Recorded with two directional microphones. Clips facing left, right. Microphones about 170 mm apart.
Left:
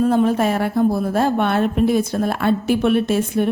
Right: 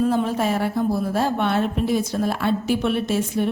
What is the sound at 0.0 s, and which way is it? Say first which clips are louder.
A woman's voice: left 4 dB; 55° left (ahead or behind).